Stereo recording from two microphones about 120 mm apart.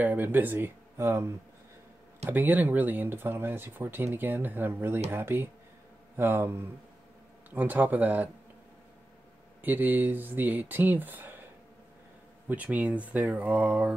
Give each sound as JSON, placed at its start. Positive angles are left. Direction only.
{"t": 0.0, "sound": "speech", "side_deg": -15}
{"t": 9.6, "sound": "speech", "side_deg": -15}
{"t": 12.4, "sound": "speech", "side_deg": -15}